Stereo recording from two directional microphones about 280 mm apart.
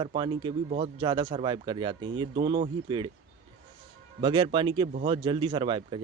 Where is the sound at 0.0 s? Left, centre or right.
Centre.